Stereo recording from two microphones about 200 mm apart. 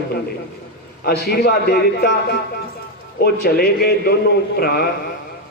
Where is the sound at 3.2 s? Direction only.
50° left (ahead or behind).